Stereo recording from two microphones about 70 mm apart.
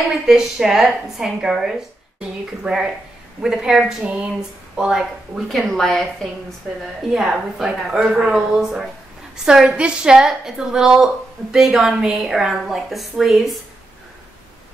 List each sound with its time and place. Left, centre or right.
0.3 s a woman's voice: centre
5.5 s a woman's voice: centre
6.8 s a woman's voice: centre